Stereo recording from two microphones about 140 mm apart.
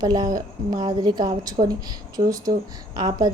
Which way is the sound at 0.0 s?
25° right (ahead or behind).